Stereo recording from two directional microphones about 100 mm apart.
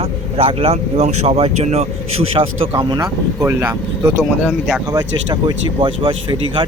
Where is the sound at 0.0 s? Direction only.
75° right (ahead or behind).